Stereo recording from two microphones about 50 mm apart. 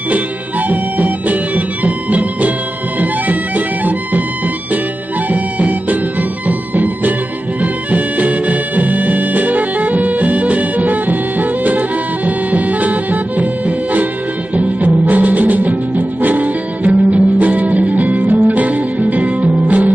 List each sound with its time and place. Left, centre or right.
0.7 s music: right
5.3 s music: right